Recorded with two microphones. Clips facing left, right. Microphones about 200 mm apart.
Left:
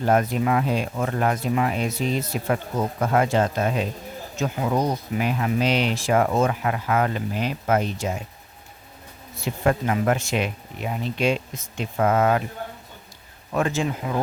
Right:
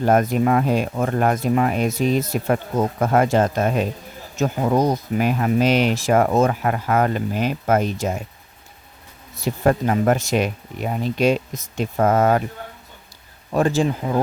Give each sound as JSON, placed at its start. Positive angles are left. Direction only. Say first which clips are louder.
{"t": 0.0, "sound": "speech", "louder": "right 4 dB", "side_deg": -45}
{"t": 9.4, "sound": "speech", "louder": "right 4 dB", "side_deg": -40}
{"t": 13.5, "sound": "speech", "louder": "right 5 dB", "side_deg": -35}